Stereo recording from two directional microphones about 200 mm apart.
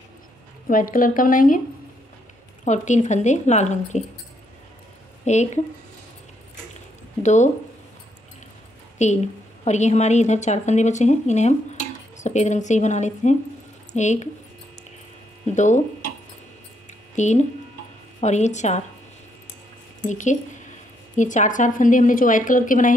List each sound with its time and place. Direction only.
0.7 s speech: 45° left (ahead or behind)
2.6 s a woman's voice: 35° left (ahead or behind)
5.2 s a woman's voice: 35° left (ahead or behind)
7.2 s a woman's voice: 35° left (ahead or behind)
8.9 s a woman's voice: 35° left (ahead or behind)
15.5 s a woman's voice: 35° left (ahead or behind)
17.1 s a woman's voice: 35° left (ahead or behind)
20.1 s a woman's voice: 40° left (ahead or behind)